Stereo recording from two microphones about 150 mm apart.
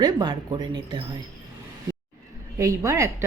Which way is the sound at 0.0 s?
30° right (ahead or behind).